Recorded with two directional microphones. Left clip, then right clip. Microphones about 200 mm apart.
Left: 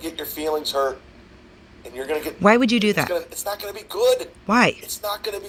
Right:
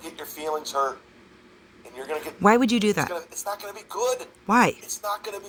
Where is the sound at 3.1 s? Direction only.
45° left (ahead or behind).